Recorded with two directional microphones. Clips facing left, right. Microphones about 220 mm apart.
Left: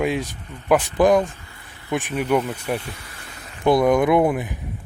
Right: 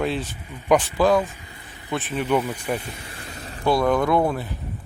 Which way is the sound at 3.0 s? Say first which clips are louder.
Right 4 dB; 30° right (ahead or behind).